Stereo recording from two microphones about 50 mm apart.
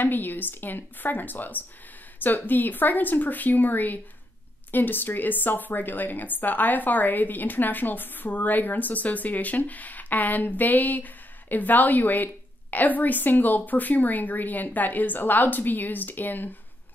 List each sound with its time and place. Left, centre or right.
0.0 s a woman's voice: left